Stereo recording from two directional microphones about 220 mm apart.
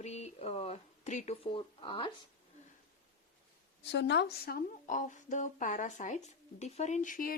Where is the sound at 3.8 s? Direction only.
50° left (ahead or behind).